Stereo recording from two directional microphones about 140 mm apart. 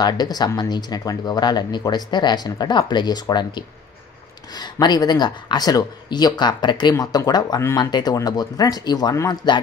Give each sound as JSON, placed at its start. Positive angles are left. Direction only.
{"t": 0.0, "sound": "speech", "side_deg": 30}